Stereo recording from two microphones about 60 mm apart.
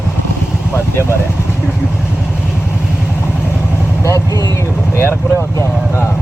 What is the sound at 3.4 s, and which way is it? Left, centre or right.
Vehicle, left.